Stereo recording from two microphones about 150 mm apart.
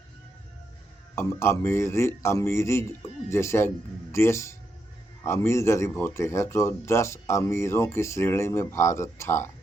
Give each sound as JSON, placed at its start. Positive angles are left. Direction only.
{"t": 1.1, "sound": "speech", "side_deg": 15}